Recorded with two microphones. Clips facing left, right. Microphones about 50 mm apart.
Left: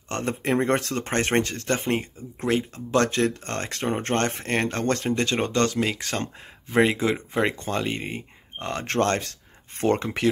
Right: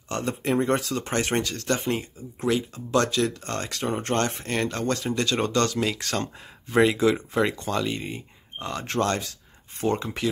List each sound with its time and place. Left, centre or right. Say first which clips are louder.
0.1 s speech: left 1 dB; left